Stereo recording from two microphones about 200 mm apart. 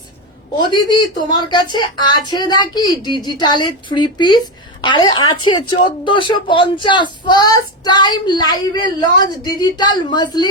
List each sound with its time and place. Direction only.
0.7 s speech: 20° left (ahead or behind)